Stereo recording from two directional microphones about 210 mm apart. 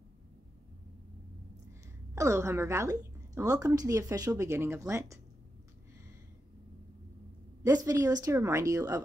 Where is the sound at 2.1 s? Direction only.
15° right (ahead or behind).